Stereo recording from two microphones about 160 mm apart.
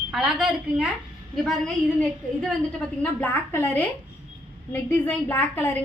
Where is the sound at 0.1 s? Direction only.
Centre (ahead or behind).